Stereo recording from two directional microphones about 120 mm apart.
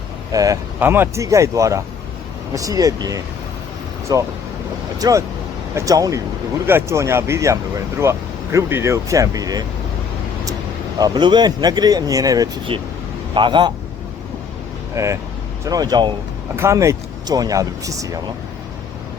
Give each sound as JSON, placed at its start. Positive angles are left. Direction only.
{"t": 0.3, "sound": "speech", "side_deg": -30}
{"t": 0.8, "sound": "speech", "side_deg": -20}
{"t": 10.9, "sound": "speech", "side_deg": -35}
{"t": 13.3, "sound": "speech", "side_deg": -40}
{"t": 14.9, "sound": "speech", "side_deg": -25}
{"t": 16.6, "sound": "speech", "side_deg": -25}